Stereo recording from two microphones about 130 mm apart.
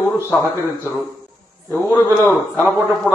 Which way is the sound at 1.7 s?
15° left (ahead or behind).